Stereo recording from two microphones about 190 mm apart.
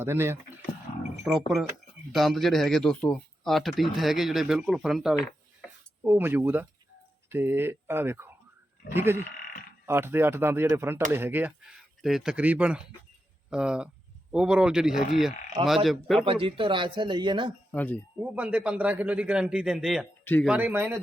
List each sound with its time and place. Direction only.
0.0 s a man's voice: 10° right (ahead or behind)
16.2 s a man's voice: 30° right (ahead or behind)
17.7 s speech: 10° left (ahead or behind)
18.2 s a man's voice: 10° right (ahead or behind)
20.2 s speech: 10° left (ahead or behind)
20.5 s a man's voice: 10° right (ahead or behind)